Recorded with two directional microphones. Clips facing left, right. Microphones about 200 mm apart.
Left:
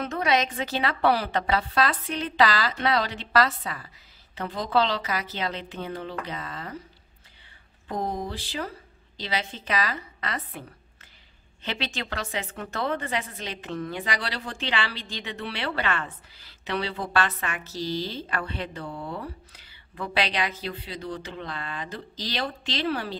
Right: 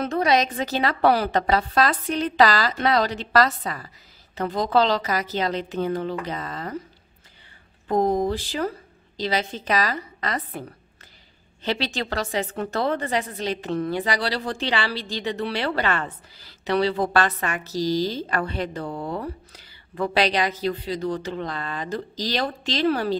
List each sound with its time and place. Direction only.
0.0 s a woman's voice: 35° right (ahead or behind)
7.9 s a woman's voice: 45° right (ahead or behind)
11.6 s a woman's voice: 35° right (ahead or behind)